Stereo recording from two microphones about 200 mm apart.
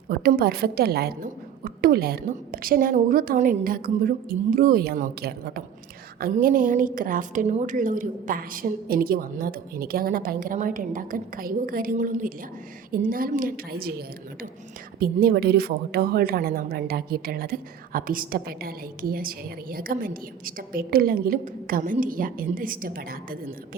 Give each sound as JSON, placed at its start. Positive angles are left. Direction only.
{"t": 0.1, "sound": "a woman's voice", "side_deg": -50}
{"t": 14.9, "sound": "a woman's voice", "side_deg": -50}